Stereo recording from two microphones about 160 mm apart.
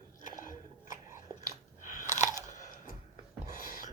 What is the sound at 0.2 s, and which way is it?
Biting, 55° left (ahead or behind).